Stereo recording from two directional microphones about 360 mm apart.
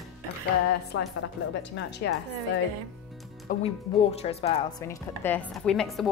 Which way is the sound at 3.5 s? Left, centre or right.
Left.